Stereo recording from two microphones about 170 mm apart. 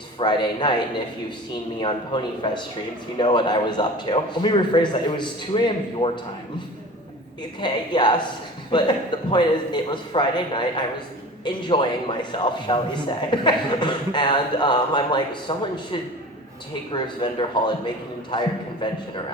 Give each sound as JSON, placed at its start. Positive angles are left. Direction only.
{"t": 0.2, "sound": "speech", "side_deg": 25}
{"t": 7.6, "sound": "speech", "side_deg": 25}